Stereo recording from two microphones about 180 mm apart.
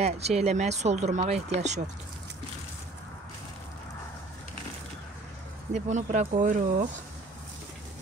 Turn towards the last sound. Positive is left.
turn(degrees=-45)  # may be behind; listen again after turning